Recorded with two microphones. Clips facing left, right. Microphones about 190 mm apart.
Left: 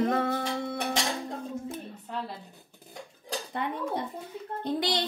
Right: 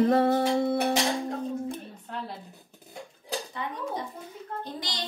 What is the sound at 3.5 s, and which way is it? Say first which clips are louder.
Speech: left 2 dB; 60° left (ahead or behind).